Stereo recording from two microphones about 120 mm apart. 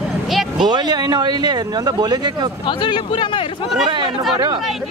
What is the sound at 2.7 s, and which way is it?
Speech, 45° left (ahead or behind).